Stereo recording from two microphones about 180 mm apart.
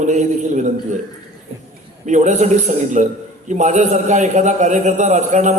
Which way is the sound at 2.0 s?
40° right (ahead or behind).